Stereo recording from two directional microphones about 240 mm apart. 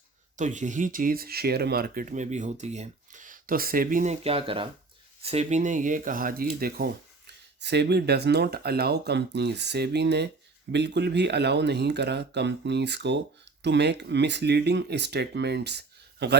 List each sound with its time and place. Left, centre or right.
0.3 s speech: right